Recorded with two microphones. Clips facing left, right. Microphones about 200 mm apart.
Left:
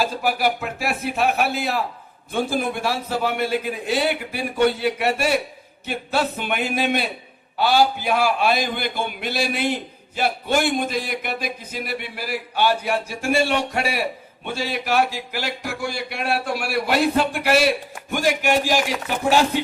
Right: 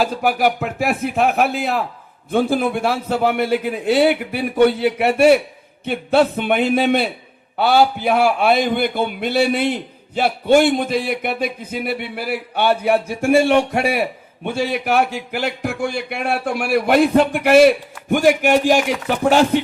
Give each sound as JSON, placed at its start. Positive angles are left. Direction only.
{"t": 0.0, "sound": "speech", "side_deg": -55}
{"t": 13.5, "sound": "a man's voice", "side_deg": -50}